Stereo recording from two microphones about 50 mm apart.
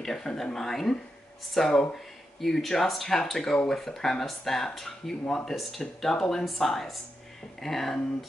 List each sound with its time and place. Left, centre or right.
0.0 s speech: centre